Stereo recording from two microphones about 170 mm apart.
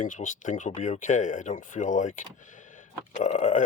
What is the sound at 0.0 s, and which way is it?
Speech, 50° left (ahead or behind).